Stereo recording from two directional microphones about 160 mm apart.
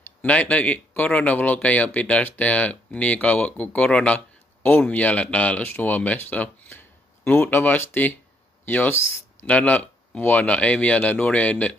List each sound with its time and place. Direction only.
0.2 s speech: 10° left (ahead or behind)